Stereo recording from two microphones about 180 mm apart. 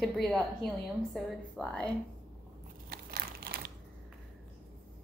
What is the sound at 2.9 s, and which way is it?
Crumpling, 55° right (ahead or behind).